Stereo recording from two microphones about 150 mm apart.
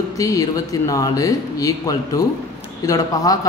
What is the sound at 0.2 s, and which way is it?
Speech, 20° left (ahead or behind).